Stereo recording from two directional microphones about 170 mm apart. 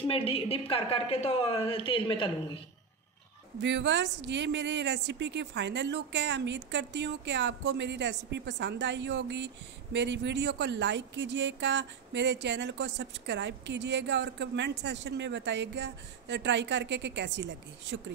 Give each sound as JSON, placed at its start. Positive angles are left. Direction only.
{"t": 0.0, "sound": "a woman's voice", "side_deg": 35}
{"t": 3.6, "sound": "a woman's voice", "side_deg": -90}